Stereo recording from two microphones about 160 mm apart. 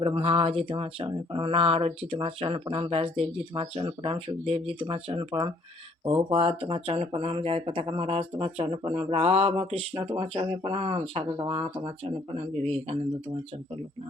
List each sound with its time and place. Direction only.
0.0 s speech: 35° right (ahead or behind)
12.6 s speech: 40° right (ahead or behind)